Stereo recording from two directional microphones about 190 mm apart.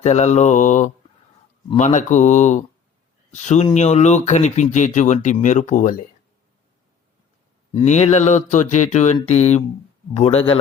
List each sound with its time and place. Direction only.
0.0 s speech: 35° left (ahead or behind)
7.7 s speech: 35° left (ahead or behind)